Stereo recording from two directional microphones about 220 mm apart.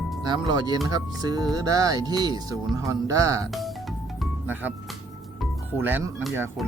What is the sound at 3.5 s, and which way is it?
Music, centre (ahead or behind).